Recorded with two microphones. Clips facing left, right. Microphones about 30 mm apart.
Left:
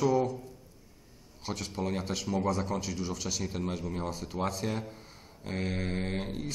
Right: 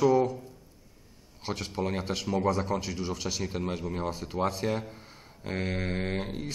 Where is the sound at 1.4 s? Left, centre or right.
Right.